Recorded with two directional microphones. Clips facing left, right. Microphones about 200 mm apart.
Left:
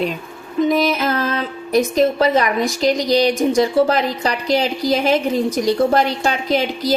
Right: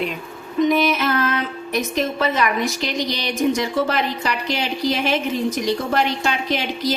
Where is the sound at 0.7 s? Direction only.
35° left (ahead or behind).